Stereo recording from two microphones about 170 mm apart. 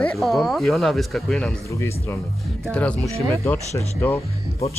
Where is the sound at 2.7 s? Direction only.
5° left (ahead or behind).